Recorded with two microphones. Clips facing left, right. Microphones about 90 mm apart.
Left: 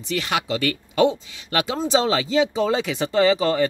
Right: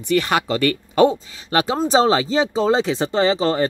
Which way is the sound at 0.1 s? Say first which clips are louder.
Right 5 dB; 45° right (ahead or behind).